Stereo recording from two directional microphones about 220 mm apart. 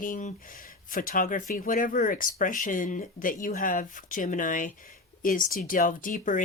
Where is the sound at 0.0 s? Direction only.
35° left (ahead or behind).